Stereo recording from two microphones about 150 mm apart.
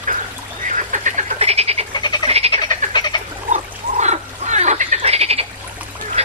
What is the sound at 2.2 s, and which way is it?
Frog, 45° right (ahead or behind).